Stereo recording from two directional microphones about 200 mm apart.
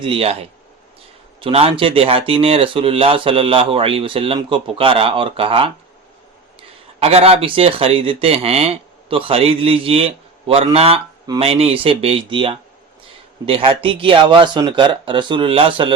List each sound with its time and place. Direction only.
0.0 s speech: 30° right (ahead or behind)
1.4 s speech: 30° right (ahead or behind)